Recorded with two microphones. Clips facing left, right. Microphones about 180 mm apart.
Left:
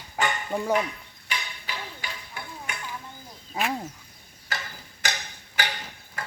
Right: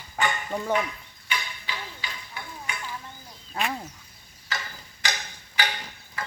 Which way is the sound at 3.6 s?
15° left (ahead or behind).